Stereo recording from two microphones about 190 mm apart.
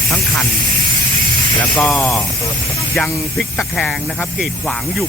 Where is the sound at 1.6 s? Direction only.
5° left (ahead or behind).